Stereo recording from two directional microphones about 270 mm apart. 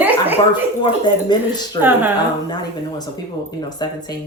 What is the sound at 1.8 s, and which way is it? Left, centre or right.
Speech, centre.